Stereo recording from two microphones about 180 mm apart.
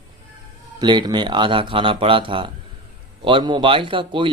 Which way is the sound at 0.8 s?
25° right (ahead or behind).